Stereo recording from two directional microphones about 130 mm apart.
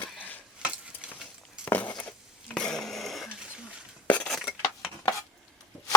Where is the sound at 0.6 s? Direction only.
10° right (ahead or behind).